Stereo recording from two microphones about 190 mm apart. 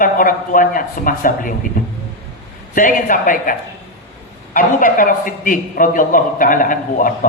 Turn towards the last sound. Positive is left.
turn(degrees=45)  # may be behind; listen again after turning